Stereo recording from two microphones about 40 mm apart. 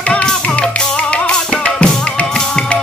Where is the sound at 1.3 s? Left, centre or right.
Left.